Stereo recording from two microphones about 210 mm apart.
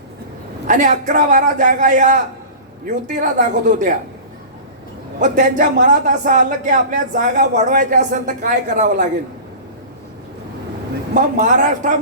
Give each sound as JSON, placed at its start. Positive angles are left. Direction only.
{"t": 0.7, "sound": "speech", "side_deg": -35}
{"t": 5.2, "sound": "speech", "side_deg": -35}
{"t": 11.1, "sound": "speech", "side_deg": -40}